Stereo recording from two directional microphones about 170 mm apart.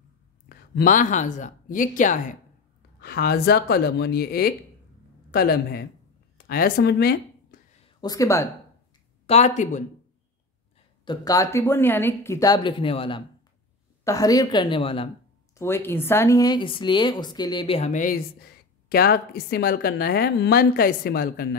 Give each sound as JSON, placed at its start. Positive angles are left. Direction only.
{"t": 0.7, "sound": "speech", "side_deg": 50}
{"t": 3.0, "sound": "speech", "side_deg": 70}
{"t": 6.3, "sound": "a sound", "side_deg": 60}
{"t": 8.0, "sound": "a woman's voice", "side_deg": 20}
{"t": 9.2, "sound": "speech", "side_deg": 40}
{"t": 11.1, "sound": "a woman's voice", "side_deg": 20}
{"t": 14.0, "sound": "a woman's voice", "side_deg": 20}
{"t": 15.5, "sound": "a woman's voice", "side_deg": 15}
{"t": 18.0, "sound": "speech", "side_deg": 60}